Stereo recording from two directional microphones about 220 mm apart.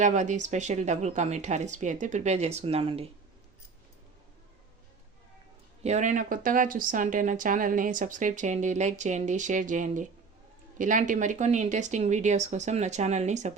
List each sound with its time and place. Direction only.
0.0 s speech: 35° right (ahead or behind)
5.8 s speech: 30° right (ahead or behind)